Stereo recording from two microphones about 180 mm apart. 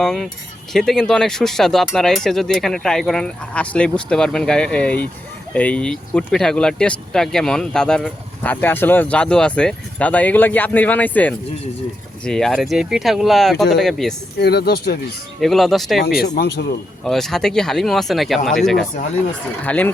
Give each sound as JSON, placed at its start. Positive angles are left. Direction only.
{"t": 0.0, "sound": "speech", "side_deg": 5}
{"t": 14.3, "sound": "speech", "side_deg": 65}
{"t": 15.4, "sound": "speech", "side_deg": 0}
{"t": 16.2, "sound": "speech", "side_deg": 65}
{"t": 17.0, "sound": "speech", "side_deg": 0}